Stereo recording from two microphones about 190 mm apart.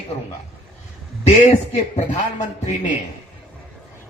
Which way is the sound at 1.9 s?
35° left (ahead or behind).